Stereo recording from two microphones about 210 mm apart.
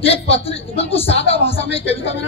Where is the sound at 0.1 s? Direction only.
25° left (ahead or behind).